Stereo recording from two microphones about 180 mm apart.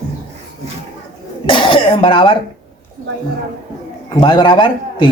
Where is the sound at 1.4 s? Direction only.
30° left (ahead or behind).